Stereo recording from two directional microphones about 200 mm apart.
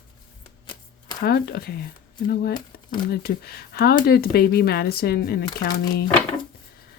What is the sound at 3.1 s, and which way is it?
Speech, 50° left (ahead or behind).